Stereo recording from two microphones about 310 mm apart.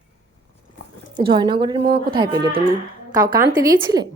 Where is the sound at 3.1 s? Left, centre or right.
Right.